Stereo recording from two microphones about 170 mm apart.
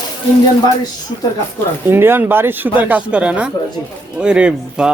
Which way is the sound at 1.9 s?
15° right (ahead or behind).